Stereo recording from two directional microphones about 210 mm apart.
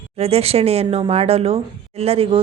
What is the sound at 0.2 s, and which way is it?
Speech, 30° right (ahead or behind).